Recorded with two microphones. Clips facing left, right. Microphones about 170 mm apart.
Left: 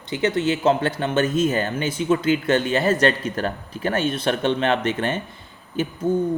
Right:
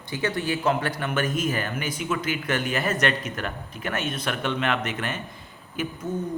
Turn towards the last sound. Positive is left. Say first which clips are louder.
# left 8 dB
turn(degrees=30)  # may be behind; listen again after turning